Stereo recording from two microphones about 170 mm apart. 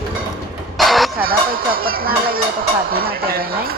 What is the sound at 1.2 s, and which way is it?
Speech, 60° right (ahead or behind).